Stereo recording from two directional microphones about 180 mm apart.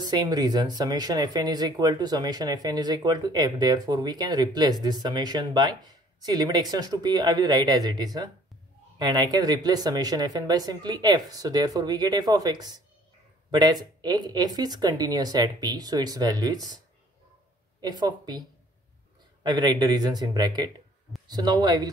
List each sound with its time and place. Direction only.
0.0 s speech: 20° right (ahead or behind)
19.4 s speech: 25° right (ahead or behind)